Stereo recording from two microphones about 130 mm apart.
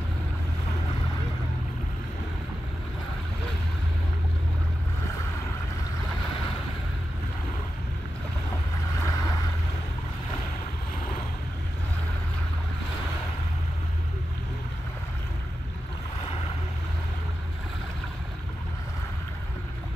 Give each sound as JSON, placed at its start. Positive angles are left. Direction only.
{"t": 9.0, "sound": "vehicle", "side_deg": 25}